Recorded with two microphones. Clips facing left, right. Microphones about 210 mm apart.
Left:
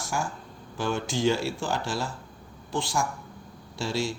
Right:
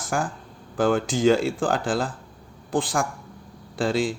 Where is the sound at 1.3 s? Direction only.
50° right (ahead or behind).